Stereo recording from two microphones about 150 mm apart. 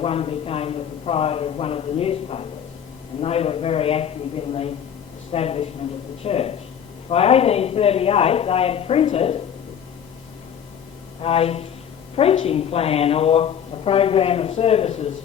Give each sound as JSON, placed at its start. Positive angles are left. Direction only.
{"t": 0.0, "sound": "a woman's voice", "side_deg": 40}
{"t": 11.2, "sound": "a woman's voice", "side_deg": 40}